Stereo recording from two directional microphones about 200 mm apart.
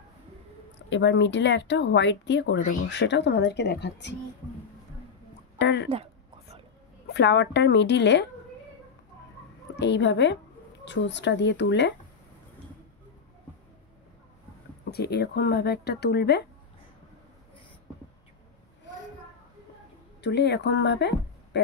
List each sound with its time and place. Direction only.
0.8 s speech: 60° left (ahead or behind)
5.6 s speech: 60° left (ahead or behind)
7.1 s speech: 60° left (ahead or behind)
9.8 s speech: 60° left (ahead or behind)
14.9 s speech: 55° left (ahead or behind)
20.2 s speech: 60° left (ahead or behind)